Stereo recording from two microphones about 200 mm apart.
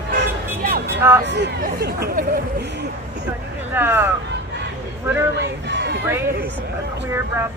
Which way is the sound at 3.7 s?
10° right (ahead or behind).